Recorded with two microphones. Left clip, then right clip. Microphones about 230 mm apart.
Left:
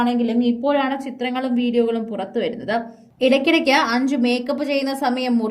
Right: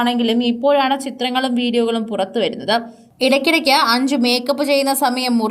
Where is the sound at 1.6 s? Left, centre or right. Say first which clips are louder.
Right 2 dB; centre.